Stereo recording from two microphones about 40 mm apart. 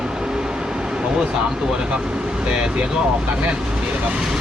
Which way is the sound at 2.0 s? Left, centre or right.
Centre.